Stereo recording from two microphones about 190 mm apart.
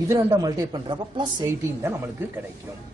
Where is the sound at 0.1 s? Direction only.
15° right (ahead or behind).